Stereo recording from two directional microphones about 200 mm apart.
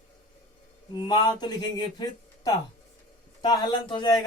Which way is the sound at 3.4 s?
25° left (ahead or behind).